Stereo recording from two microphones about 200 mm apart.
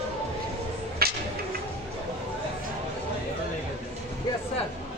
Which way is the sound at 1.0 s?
50° right (ahead or behind).